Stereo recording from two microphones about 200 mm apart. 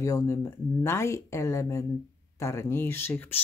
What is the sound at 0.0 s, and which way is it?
Speech, 15° left (ahead or behind).